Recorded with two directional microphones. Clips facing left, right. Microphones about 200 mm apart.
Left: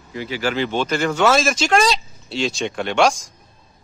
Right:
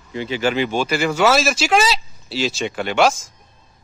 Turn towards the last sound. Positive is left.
turn(degrees=0)  # may be behind; listen again after turning